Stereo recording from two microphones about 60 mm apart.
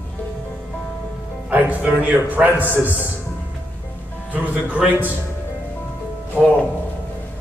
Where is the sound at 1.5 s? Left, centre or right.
Right.